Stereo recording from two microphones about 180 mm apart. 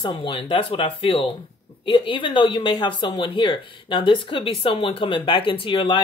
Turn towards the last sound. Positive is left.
turn(degrees=25)  # may be behind; listen again after turning